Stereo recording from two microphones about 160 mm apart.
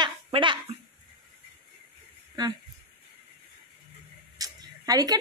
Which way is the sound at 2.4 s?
25° right (ahead or behind).